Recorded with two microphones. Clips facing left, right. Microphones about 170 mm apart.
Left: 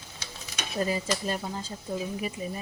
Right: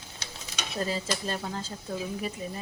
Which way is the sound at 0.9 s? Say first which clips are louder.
Left 2 dB; 10° left (ahead or behind).